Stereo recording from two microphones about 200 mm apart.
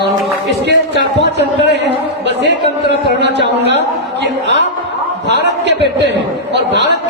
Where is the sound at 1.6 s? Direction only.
60° right (ahead or behind).